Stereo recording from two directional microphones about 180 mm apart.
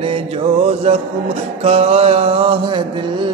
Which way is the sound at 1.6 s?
35° right (ahead or behind).